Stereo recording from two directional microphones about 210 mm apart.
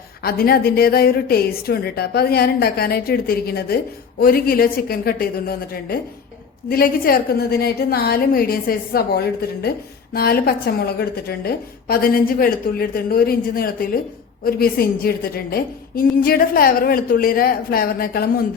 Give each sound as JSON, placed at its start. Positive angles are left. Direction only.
{"t": 0.2, "sound": "a woman's voice", "side_deg": 45}